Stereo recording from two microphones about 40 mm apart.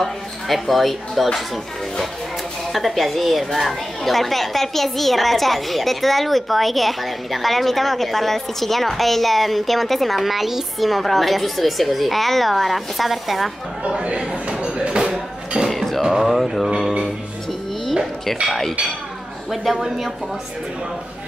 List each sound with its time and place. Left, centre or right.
0.0 s a woman's voice: centre
2.7 s a woman's voice: centre
13.8 s a sound: right
15.7 s a sound: centre
16.0 s speech: centre
19.5 s a woman's voice: centre